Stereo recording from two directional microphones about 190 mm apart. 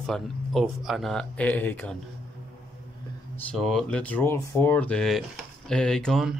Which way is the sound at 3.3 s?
5° left (ahead or behind).